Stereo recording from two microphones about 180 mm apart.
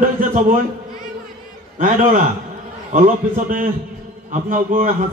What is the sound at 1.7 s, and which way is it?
A man's voice, 50° right (ahead or behind).